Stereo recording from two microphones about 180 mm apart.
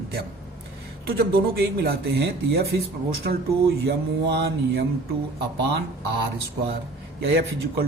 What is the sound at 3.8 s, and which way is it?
Speech, 65° right (ahead or behind).